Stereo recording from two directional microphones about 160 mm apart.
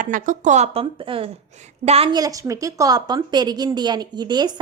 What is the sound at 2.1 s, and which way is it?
A woman's voice, 20° right (ahead or behind).